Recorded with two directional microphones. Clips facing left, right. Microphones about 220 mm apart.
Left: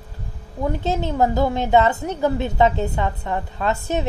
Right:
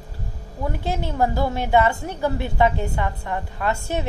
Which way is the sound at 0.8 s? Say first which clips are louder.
Left 2 dB; 20° left (ahead or behind).